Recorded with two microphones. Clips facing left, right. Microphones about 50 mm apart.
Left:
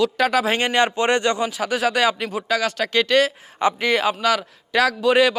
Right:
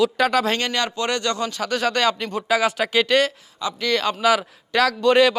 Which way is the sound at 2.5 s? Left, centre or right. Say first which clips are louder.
Right 2 dB; centre.